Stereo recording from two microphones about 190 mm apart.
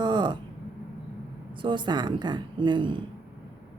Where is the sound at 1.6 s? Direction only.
25° right (ahead or behind).